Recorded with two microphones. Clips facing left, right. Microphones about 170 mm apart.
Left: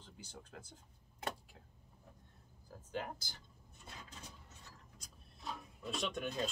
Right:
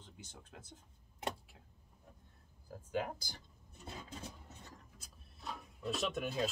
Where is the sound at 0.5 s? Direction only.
Centre (ahead or behind).